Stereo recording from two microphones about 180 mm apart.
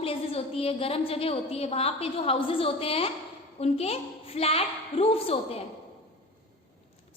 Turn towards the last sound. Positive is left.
turn(degrees=30)  # may be behind; listen again after turning